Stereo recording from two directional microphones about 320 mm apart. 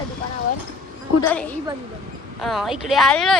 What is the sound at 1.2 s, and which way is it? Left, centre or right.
Speech, centre.